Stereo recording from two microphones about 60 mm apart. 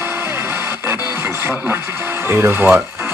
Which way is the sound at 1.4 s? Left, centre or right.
Right.